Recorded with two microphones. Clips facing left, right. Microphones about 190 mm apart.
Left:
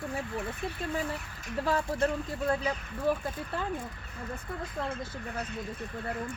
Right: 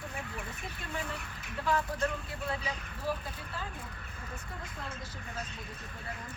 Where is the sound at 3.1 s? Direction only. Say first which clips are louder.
Left 6 dB; 55° left (ahead or behind).